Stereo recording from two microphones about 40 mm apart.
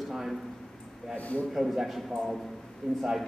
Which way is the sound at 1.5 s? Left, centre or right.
Centre.